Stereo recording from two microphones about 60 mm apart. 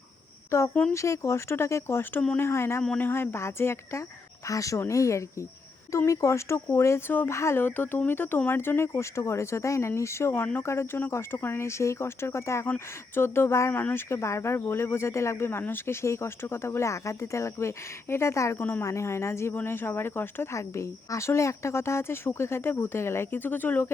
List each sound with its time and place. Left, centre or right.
0.5 s speech: left
3.0 s speech: left
4.4 s speech: left
7.6 s speech: left
8.9 s speech: left
18.6 s speech: left
18.9 s speech: left
20.5 s speech: left